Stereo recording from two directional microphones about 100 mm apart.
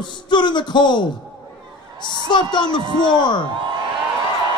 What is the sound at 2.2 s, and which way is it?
A man's voice, 50° left (ahead or behind).